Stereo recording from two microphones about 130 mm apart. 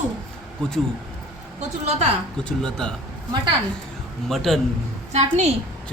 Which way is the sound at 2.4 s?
5° left (ahead or behind).